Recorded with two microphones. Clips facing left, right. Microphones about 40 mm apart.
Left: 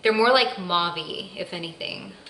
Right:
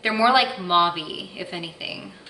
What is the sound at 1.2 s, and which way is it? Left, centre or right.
Speech, centre.